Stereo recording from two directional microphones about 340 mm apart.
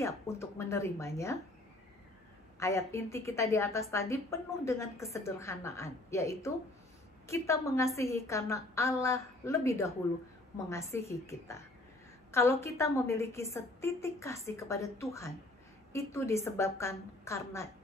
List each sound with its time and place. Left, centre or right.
0.0 s a woman's voice: centre
2.6 s a woman's voice: centre